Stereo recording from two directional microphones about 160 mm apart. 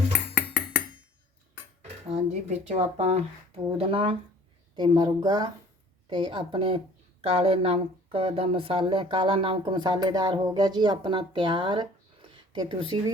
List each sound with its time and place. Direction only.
2.0 s a woman's voice: 45° right (ahead or behind)